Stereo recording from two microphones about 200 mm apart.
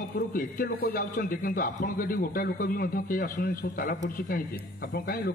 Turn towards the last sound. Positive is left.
turn(degrees=50)  # may be behind; listen again after turning